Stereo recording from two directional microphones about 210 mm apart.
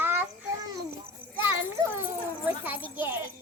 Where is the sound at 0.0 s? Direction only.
10° right (ahead or behind).